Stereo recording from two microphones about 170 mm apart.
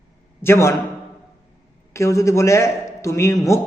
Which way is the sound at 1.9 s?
15° left (ahead or behind).